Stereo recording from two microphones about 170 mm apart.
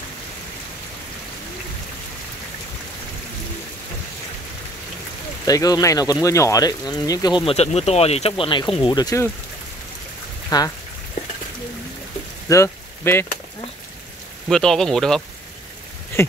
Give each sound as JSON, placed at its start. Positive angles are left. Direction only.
{"t": 5.4, "sound": "speech", "side_deg": 20}
{"t": 10.5, "sound": "speech", "side_deg": 25}
{"t": 12.4, "sound": "speech", "side_deg": 15}
{"t": 14.5, "sound": "speech", "side_deg": 5}
{"t": 16.2, "sound": "a sound", "side_deg": 15}